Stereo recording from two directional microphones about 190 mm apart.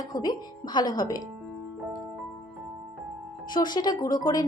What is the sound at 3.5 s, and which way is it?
Speech, 20° left (ahead or behind).